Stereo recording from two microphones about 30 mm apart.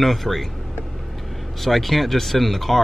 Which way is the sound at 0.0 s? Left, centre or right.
Centre.